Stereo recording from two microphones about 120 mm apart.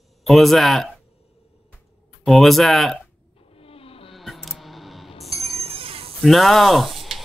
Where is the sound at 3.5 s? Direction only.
55° left (ahead or behind).